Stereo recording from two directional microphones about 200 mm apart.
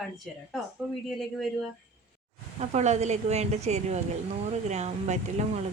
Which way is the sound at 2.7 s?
35° right (ahead or behind).